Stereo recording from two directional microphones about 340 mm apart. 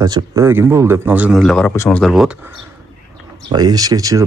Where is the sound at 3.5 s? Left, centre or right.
Centre.